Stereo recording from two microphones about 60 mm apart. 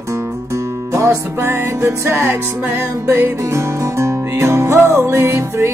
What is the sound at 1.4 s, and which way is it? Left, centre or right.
Music, right.